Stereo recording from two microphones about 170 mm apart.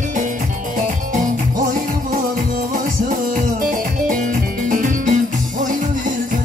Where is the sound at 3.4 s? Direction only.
50° right (ahead or behind).